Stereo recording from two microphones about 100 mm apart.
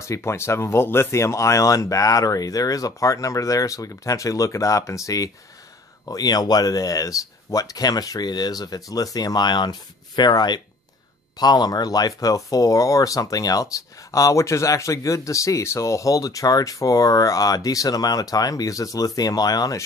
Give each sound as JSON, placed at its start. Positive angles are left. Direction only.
{"t": 0.0, "sound": "speech", "side_deg": 30}